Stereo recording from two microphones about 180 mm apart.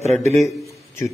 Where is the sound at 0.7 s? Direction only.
15° left (ahead or behind).